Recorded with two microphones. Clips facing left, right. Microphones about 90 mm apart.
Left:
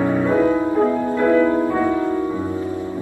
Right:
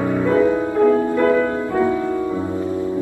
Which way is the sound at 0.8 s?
20° left (ahead or behind).